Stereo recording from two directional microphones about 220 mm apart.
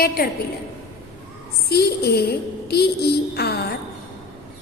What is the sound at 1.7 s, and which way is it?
A woman's voice, 45° left (ahead or behind).